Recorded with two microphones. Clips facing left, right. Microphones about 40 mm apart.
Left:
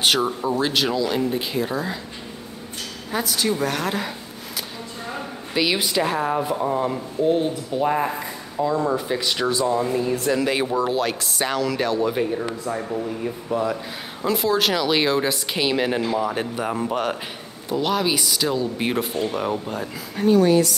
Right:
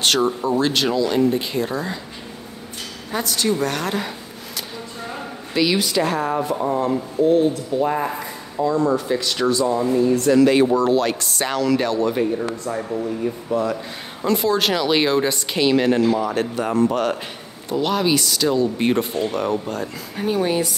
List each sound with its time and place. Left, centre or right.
0.0 s speech: centre
3.1 s speech: centre
5.1 s speech: centre
6.8 s speech: centre
8.6 s speech: centre
20.2 s speech: centre